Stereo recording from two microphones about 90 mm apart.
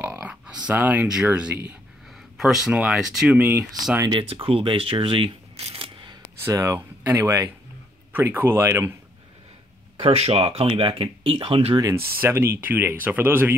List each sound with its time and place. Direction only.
0.0 s speech: 20° right (ahead or behind)
2.3 s speech: 5° right (ahead or behind)
3.3 s speech: 15° right (ahead or behind)
4.1 s speech: 75° right (ahead or behind)
5.8 s single-lens reflex camera: 65° right (ahead or behind)
6.5 s speech: 35° right (ahead or behind)
8.1 s speech: 20° right (ahead or behind)
9.9 s speech: 90° right
11.9 s speech: 30° right (ahead or behind)